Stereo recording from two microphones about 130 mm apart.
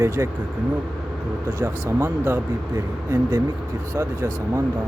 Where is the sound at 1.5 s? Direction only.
20° right (ahead or behind).